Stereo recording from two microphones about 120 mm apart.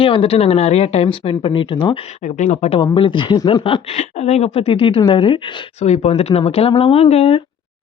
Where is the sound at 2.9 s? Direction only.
45° left (ahead or behind).